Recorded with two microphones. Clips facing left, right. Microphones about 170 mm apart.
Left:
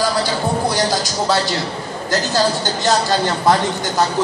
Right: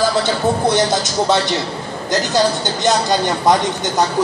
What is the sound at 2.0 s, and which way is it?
A man's voice, 20° right (ahead or behind).